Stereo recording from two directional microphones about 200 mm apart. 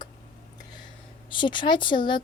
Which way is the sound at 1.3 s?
25° left (ahead or behind).